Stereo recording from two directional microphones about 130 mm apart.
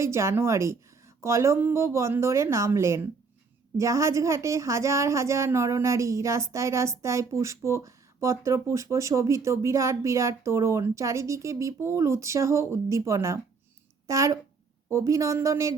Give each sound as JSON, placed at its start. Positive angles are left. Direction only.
{"t": 0.0, "sound": "a woman's voice", "side_deg": -20}